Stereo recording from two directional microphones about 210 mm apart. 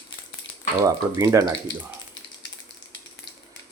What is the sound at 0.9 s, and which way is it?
Speech, 15° right (ahead or behind).